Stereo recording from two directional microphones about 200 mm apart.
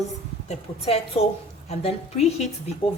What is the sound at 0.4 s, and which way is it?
A woman's voice, 30° left (ahead or behind).